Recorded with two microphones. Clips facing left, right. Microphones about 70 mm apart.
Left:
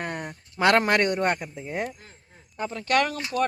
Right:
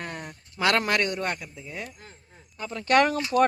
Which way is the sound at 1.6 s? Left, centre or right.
Left.